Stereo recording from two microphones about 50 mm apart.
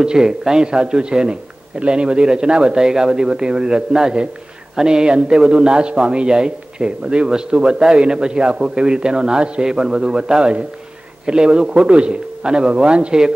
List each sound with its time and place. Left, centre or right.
0.0 s a man's voice: centre